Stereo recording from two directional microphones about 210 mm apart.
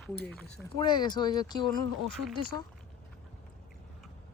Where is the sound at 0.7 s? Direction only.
20° left (ahead or behind).